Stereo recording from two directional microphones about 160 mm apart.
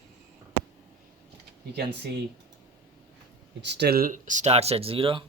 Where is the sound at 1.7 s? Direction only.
90° right.